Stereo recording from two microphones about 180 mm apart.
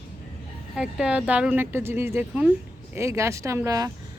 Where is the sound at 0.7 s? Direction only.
5° right (ahead or behind).